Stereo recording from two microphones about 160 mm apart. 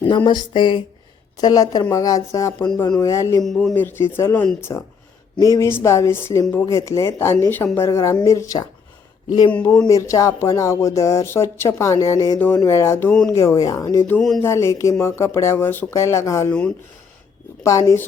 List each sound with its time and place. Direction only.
0.3 s speech: 30° left (ahead or behind)
3.4 s a man's voice: centre (ahead or behind)
3.8 s speech: 15° left (ahead or behind)
5.5 s speech: 15° left (ahead or behind)
9.5 s speech: 10° left (ahead or behind)
9.8 s speech: 20° left (ahead or behind)
14.2 s a man's voice: centre (ahead or behind)
14.4 s speech: 15° left (ahead or behind)
16.5 s speech: 10° left (ahead or behind)
17.6 s speech: 20° left (ahead or behind)